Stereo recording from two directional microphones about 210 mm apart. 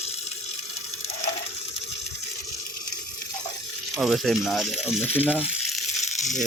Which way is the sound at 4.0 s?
Centre (ahead or behind).